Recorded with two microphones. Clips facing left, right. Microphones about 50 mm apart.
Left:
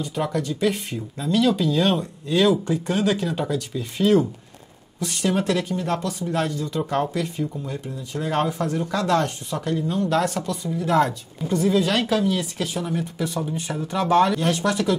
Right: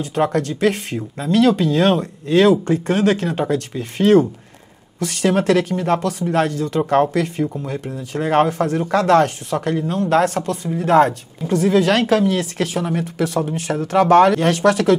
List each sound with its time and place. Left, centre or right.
0.0 s speech: right
0.9 s a woman's voice: right
1.3 s speech: right
6.0 s speech: right
10.7 s a woman's voice: right
11.5 s speech: right
13.9 s speech: right